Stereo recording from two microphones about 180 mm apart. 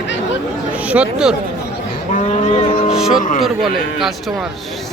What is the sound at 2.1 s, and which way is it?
Speech, 40° left (ahead or behind).